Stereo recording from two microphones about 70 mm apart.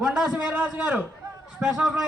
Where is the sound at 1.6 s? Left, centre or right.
Centre.